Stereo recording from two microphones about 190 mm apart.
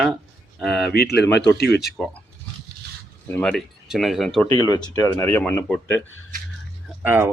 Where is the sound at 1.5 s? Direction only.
55° left (ahead or behind).